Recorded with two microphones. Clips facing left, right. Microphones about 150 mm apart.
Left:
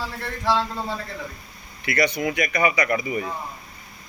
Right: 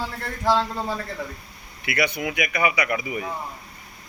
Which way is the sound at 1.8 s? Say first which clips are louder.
Left 2 dB; 5° right (ahead or behind).